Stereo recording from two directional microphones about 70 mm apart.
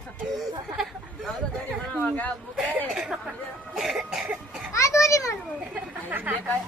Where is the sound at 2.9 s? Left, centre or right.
Centre.